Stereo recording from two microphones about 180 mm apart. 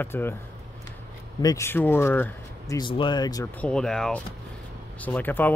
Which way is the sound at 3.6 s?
5° left (ahead or behind).